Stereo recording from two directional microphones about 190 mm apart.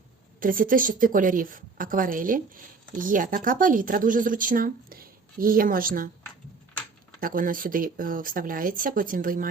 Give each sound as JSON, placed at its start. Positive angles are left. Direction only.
{"t": 0.3, "sound": "speech", "side_deg": -45}
{"t": 7.2, "sound": "speech", "side_deg": -45}